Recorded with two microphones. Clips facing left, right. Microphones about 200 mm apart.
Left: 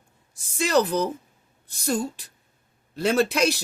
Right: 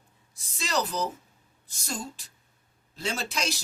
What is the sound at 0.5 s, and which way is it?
A woman's voice, 55° left (ahead or behind).